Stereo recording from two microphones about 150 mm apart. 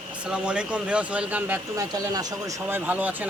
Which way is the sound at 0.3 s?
5° right (ahead or behind).